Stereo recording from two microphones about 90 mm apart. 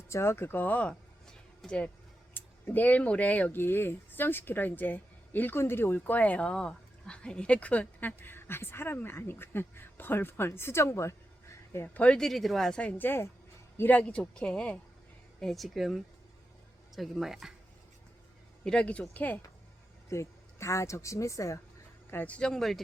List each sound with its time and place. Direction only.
0.1 s speech: 30° left (ahead or behind)
11.9 s speech: 10° left (ahead or behind)
13.0 s speech: 25° left (ahead or behind); by 17.5 s 5° right (ahead or behind)
18.6 s speech: 10° left (ahead or behind)
20.1 s a woman's voice: 30° left (ahead or behind)
22.1 s speech: 15° left (ahead or behind)